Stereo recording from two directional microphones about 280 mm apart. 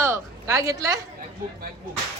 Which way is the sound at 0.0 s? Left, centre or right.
Centre.